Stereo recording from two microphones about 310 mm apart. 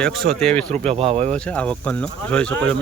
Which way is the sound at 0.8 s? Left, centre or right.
Centre.